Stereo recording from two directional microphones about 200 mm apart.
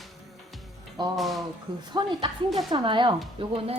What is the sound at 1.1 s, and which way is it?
Speech, centre (ahead or behind).